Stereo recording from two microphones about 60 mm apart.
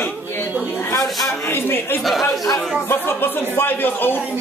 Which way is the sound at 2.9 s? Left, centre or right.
Left.